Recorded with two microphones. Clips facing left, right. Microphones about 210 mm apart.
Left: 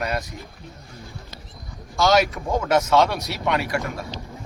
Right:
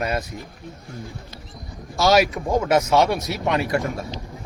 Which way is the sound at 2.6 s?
20° right (ahead or behind).